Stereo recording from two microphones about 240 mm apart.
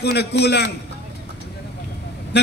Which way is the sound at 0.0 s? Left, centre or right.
Left.